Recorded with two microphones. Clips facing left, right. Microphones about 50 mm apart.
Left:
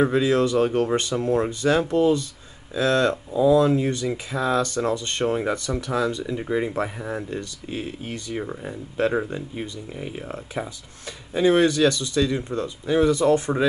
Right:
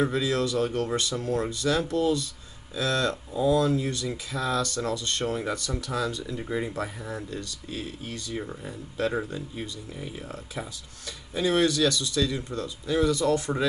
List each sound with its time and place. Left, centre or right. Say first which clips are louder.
0.0 s speech: left 6 dB; left
10.3 s speech: left 6 dB; left